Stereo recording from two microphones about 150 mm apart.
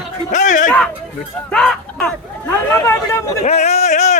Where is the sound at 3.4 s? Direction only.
45° left (ahead or behind).